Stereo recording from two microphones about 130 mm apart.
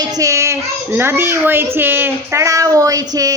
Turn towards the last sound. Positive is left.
turn(degrees=-30)  # may be behind; listen again after turning